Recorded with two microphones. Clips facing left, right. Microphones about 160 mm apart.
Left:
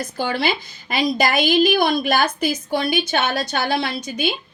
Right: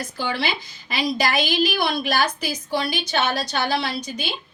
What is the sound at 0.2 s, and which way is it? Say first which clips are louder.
A woman's voice: left 4 dB; 50° left (ahead or behind).